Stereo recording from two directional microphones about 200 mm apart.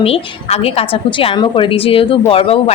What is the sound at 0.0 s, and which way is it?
A woman's voice, 30° left (ahead or behind).